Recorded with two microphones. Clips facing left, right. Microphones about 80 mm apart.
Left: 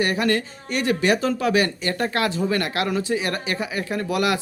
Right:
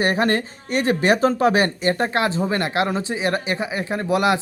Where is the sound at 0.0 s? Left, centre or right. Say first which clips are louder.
Right 2 dB; right.